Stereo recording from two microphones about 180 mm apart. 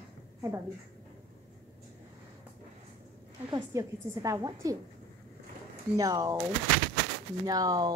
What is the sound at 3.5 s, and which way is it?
A woman's voice, 20° right (ahead or behind).